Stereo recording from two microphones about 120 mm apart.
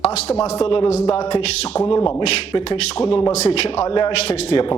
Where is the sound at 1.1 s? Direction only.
50° left (ahead or behind).